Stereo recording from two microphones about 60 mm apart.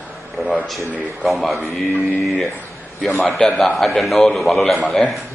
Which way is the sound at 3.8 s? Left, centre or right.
Centre.